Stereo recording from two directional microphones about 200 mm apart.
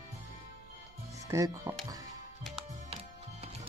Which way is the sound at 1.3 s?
15° right (ahead or behind).